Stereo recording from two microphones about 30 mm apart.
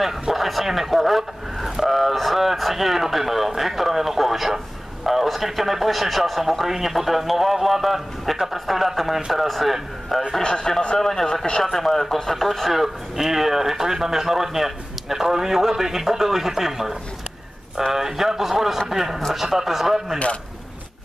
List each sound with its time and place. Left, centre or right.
0.3 s speech: centre
5.0 s a sound: centre
5.3 s speech: centre
10.4 s a man's voice: left
11.0 s speech: centre
12.7 s speech: centre